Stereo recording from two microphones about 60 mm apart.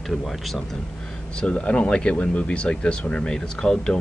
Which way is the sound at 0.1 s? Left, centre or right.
Centre.